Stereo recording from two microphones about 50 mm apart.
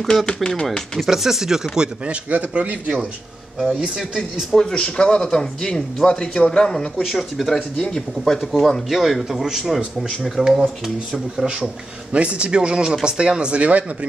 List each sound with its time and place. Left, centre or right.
0.3 s speech: centre
0.9 s speech: centre
2.2 s a man's voice: right
4.6 s speech: centre
7.0 s speech: centre
11.4 s a man's voice: right